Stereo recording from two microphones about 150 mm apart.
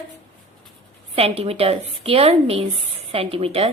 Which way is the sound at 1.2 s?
40° right (ahead or behind).